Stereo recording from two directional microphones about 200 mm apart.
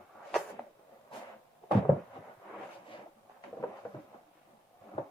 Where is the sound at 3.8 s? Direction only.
10° left (ahead or behind).